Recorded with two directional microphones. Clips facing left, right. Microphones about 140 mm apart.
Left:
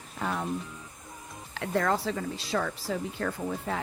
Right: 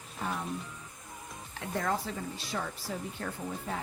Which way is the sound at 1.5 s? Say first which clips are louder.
Left 5 dB; 75° left (ahead or behind).